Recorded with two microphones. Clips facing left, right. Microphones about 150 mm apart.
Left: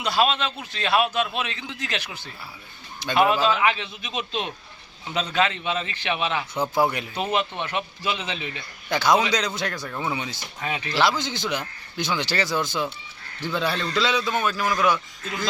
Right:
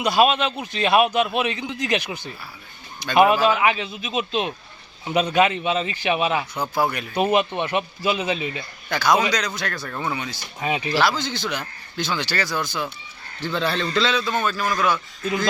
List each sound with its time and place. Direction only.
0.0 s a man's voice: 15° right (ahead or behind)
6.5 s speech: 25° left (ahead or behind)
7.2 s speech: 10° right (ahead or behind)
8.9 s a man's voice: 20° left (ahead or behind)
10.2 s speech: 20° left (ahead or behind)
10.6 s speech: 15° right (ahead or behind)
11.2 s speech: 20° left (ahead or behind)
13.4 s a man's voice: 10° left (ahead or behind)